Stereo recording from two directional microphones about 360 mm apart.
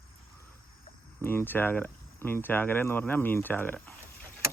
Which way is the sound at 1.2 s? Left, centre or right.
Centre.